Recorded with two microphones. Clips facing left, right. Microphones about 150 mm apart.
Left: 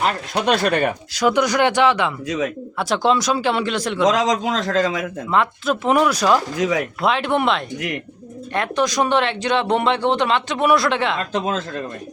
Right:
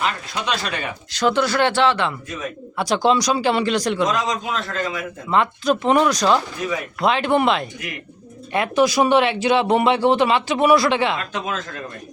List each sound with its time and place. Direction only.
0.3 s speech: 55° left (ahead or behind)
1.1 s speech: 10° left (ahead or behind)
2.2 s a man's voice: 90° left
2.7 s speech: centre (ahead or behind)
4.0 s a man's voice: 90° left
5.3 s speech: centre (ahead or behind)
6.6 s a man's voice: 90° left
7.0 s speech: centre (ahead or behind)
11.3 s speech: 35° left (ahead or behind)